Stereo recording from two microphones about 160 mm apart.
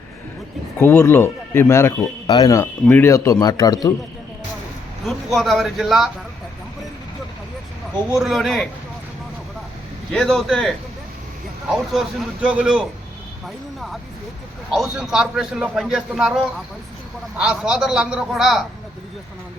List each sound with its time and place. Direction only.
0.8 s speech: 15° left (ahead or behind)
5.0 s a man's voice: centre (ahead or behind)
8.1 s a man's voice: centre (ahead or behind)
10.1 s a man's voice: 5° left (ahead or behind)
11.7 s a man's voice: 5° right (ahead or behind)
14.7 s a man's voice: centre (ahead or behind)